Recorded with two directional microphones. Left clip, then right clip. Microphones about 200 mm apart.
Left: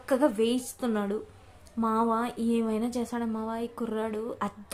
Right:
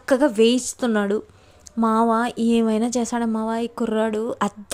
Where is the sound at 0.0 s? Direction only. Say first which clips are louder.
Right 8 dB; 40° right (ahead or behind).